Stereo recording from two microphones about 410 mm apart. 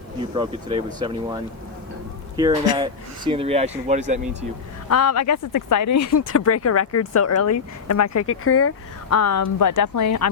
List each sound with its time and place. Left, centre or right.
0.2 s speech: centre
2.7 s speech: centre
4.9 s speech: left